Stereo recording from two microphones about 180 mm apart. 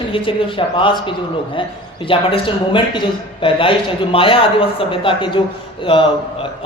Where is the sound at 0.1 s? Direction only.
30° left (ahead or behind).